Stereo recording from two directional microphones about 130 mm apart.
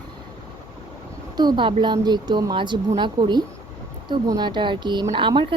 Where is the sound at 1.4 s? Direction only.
35° right (ahead or behind).